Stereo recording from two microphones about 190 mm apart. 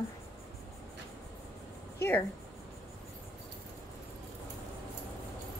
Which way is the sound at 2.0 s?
10° left (ahead or behind).